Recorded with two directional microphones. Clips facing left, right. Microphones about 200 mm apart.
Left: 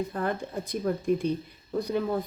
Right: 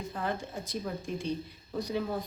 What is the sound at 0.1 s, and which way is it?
Speech, 55° left (ahead or behind).